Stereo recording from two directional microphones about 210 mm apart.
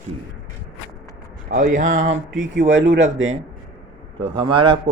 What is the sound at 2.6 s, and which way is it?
Speech, 60° right (ahead or behind).